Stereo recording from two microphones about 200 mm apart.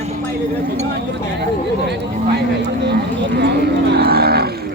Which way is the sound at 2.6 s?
60° right (ahead or behind).